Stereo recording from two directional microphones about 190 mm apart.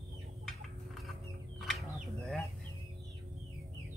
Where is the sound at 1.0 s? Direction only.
Centre (ahead or behind).